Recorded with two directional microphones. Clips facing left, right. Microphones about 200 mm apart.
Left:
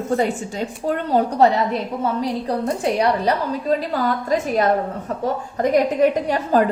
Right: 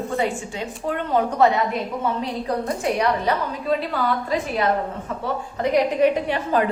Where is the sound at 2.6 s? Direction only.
30° left (ahead or behind).